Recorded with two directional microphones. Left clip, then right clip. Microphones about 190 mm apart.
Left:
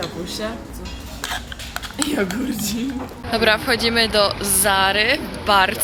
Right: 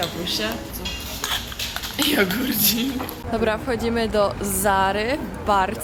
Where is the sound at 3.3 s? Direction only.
15° right (ahead or behind).